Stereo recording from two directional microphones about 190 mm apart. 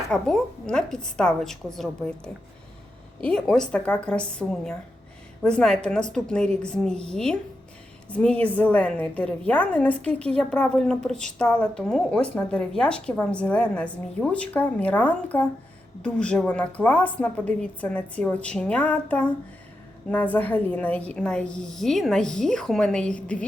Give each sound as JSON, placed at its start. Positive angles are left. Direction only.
{"t": 0.1, "sound": "a woman's voice", "side_deg": 5}